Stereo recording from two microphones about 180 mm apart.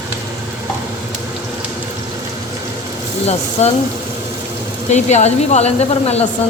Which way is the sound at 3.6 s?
40° left (ahead or behind).